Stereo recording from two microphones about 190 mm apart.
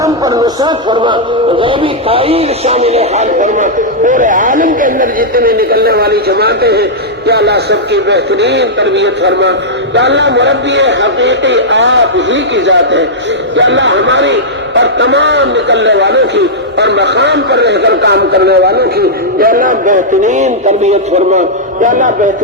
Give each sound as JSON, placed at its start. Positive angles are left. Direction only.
{"t": 0.0, "sound": "a man's voice", "side_deg": -20}